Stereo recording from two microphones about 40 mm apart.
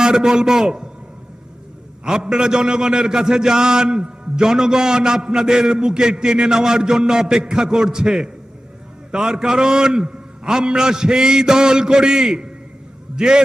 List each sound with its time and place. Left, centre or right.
0.0 s a man's voice: centre
2.0 s a man's voice: centre